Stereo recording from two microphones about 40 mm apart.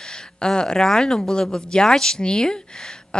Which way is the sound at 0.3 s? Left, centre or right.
Left.